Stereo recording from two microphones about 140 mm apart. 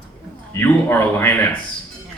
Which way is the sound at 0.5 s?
15° left (ahead or behind).